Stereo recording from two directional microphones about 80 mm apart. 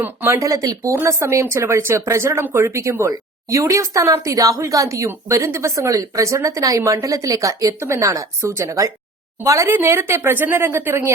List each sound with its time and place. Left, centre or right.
0.3 s speech: right
9.6 s speech: right